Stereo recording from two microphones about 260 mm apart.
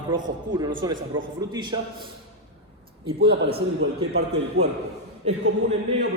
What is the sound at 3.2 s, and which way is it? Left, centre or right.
A man's voice, right.